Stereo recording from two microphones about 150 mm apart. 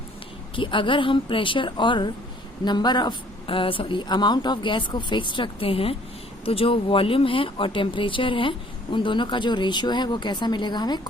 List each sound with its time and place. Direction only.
0.5 s speech: 35° left (ahead or behind)